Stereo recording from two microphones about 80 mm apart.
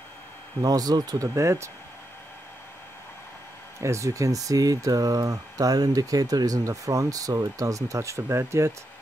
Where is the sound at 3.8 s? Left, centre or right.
Right.